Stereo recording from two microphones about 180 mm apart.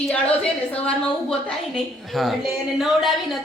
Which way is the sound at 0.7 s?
5° left (ahead or behind).